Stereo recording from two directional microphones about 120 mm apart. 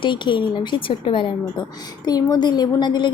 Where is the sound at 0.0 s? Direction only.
40° left (ahead or behind).